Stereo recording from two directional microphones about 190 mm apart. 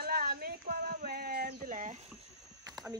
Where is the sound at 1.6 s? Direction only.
40° right (ahead or behind).